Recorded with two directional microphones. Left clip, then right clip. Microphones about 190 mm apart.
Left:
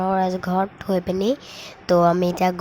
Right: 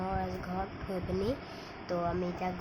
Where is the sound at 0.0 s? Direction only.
45° left (ahead or behind).